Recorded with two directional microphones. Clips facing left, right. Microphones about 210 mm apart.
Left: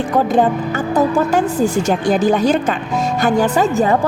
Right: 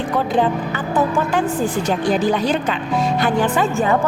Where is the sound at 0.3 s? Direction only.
45° left (ahead or behind).